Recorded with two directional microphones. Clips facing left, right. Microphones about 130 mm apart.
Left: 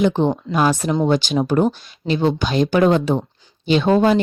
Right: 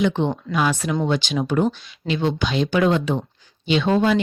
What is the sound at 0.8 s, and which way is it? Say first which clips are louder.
Speech: left 4 dB; 25° left (ahead or behind).